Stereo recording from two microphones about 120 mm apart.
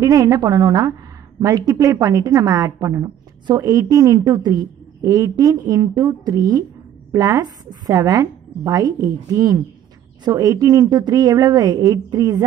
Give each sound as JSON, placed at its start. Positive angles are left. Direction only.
{"t": 0.0, "sound": "a woman's voice", "side_deg": -30}